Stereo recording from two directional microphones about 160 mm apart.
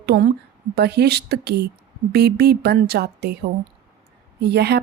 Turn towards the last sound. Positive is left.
turn(degrees=-90)